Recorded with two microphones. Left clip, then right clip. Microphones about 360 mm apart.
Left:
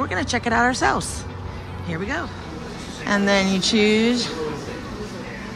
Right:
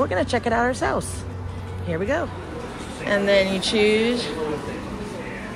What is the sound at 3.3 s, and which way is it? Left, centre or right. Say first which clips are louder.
Speech: right 1 dB; centre.